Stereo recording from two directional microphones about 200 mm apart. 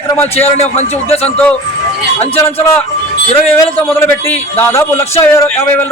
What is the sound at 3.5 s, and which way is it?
Speech, 10° left (ahead or behind).